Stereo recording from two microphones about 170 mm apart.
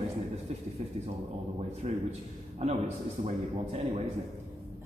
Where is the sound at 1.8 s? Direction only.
40° right (ahead or behind).